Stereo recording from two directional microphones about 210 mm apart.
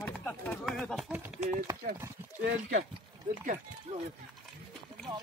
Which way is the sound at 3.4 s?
35° right (ahead or behind).